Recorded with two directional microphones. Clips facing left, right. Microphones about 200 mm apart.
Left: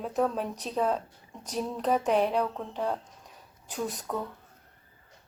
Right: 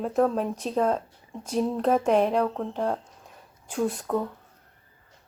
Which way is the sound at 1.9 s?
45° right (ahead or behind).